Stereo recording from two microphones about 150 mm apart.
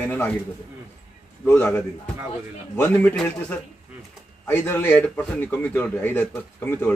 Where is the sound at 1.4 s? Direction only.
15° left (ahead or behind).